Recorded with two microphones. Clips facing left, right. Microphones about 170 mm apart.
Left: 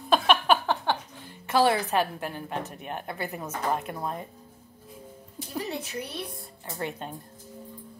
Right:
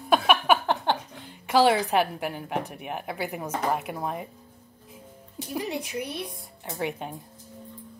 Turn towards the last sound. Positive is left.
turn(degrees=-15)  # may be behind; listen again after turning